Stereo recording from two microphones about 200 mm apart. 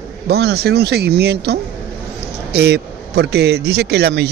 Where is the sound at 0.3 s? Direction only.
55° right (ahead or behind).